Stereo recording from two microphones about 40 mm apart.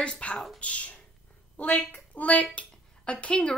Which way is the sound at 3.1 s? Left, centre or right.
Left.